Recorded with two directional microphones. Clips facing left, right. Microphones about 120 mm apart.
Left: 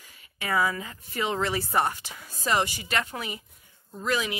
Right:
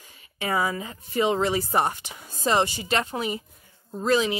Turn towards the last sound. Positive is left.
turn(degrees=-30)  # may be behind; listen again after turning